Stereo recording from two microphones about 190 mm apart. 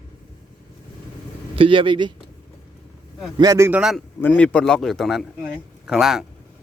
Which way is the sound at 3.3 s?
20° right (ahead or behind).